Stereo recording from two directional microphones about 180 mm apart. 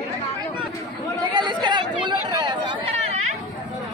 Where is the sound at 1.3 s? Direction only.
25° right (ahead or behind).